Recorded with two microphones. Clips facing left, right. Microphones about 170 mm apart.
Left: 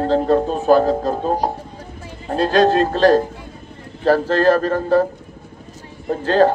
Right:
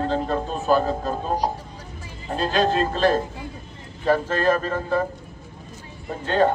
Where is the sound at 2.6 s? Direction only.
80° left.